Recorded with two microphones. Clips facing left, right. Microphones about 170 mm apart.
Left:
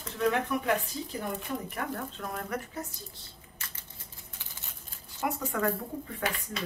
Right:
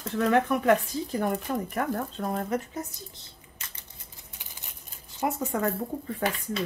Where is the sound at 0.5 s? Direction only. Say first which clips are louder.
Right 4 dB; 60° right (ahead or behind).